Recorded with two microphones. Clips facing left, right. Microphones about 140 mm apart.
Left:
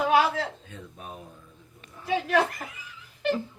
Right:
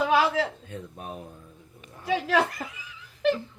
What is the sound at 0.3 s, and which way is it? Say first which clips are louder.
Speech: right 4 dB; 60° right (ahead or behind).